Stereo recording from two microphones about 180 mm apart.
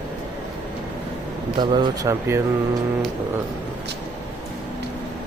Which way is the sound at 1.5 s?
25° right (ahead or behind).